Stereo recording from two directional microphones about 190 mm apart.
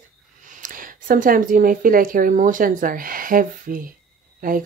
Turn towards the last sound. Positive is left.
turn(degrees=-45)  # may be behind; listen again after turning